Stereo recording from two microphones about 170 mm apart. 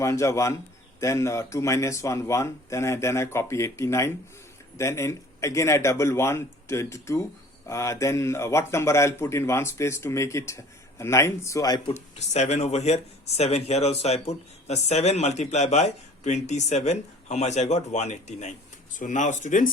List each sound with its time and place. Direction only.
0.0 s a man's voice: 20° left (ahead or behind)
11.9 s speech: 40° left (ahead or behind)